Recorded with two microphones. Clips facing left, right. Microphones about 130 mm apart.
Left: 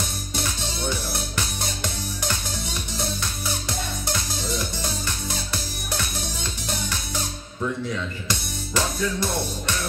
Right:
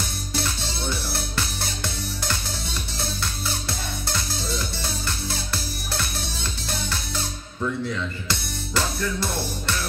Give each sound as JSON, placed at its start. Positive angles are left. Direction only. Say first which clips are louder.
{"t": 0.3, "sound": "music", "louder": "right 2 dB", "side_deg": 15}
{"t": 8.3, "sound": "music", "louder": "even", "side_deg": 15}